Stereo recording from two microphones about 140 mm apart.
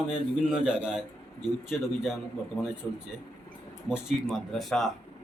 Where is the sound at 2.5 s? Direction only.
20° left (ahead or behind).